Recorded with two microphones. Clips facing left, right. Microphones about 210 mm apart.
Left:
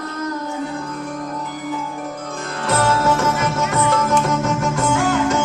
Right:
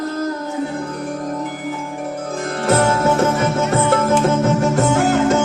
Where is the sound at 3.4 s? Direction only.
30° right (ahead or behind).